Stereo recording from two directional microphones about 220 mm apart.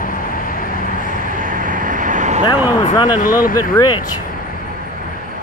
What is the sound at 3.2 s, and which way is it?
Speech, 40° left (ahead or behind).